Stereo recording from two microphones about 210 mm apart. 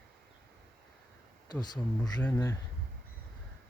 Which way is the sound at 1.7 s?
20° left (ahead or behind).